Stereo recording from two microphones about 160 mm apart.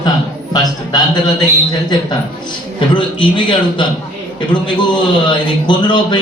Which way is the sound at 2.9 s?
30° left (ahead or behind).